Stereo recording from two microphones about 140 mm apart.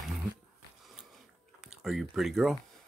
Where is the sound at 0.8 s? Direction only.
Centre (ahead or behind).